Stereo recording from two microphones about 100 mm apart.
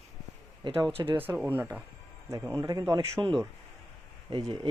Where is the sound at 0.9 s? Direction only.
70° right (ahead or behind).